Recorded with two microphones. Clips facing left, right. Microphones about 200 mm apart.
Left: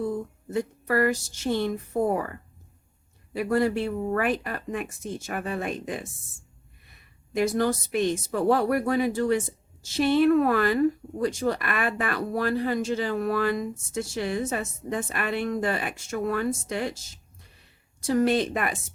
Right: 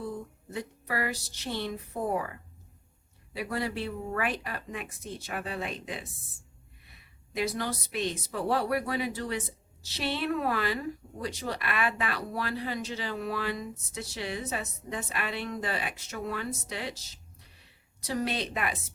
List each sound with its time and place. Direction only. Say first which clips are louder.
0.5 s speech: left 9 dB; 50° left (ahead or behind)
7.3 s speech: left 8 dB; 45° left (ahead or behind)